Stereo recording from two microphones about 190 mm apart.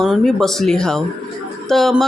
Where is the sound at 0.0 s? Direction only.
Centre (ahead or behind).